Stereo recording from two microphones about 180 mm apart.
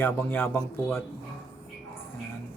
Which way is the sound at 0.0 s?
10° left (ahead or behind).